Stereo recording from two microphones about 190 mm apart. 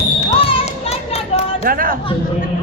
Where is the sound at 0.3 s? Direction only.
35° left (ahead or behind).